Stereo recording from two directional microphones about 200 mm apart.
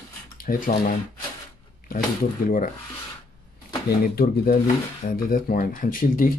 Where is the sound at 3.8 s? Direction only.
50° left (ahead or behind).